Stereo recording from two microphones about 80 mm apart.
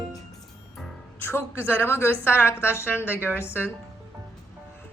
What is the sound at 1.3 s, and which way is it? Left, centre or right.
A woman's voice, left.